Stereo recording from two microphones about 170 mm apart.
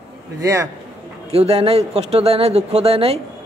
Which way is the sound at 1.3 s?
35° right (ahead or behind).